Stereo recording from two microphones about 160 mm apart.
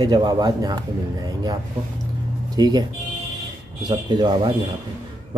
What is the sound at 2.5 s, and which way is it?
Speech, 25° right (ahead or behind).